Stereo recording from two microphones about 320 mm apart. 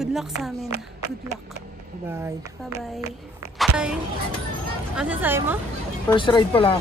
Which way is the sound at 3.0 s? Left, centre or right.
Centre.